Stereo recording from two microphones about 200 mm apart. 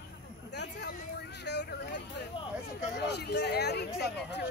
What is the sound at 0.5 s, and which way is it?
Speech, 60° left (ahead or behind).